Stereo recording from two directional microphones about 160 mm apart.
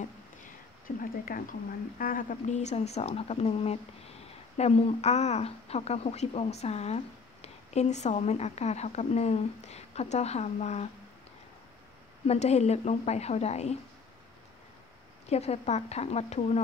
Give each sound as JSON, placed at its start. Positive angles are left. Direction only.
{"t": 0.8, "sound": "a woman's voice", "side_deg": 60}
{"t": 12.3, "sound": "a woman's voice", "side_deg": 40}
{"t": 15.2, "sound": "a woman's voice", "side_deg": 40}